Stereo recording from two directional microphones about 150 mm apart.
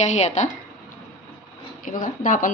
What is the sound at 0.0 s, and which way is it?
Speech, 50° left (ahead or behind).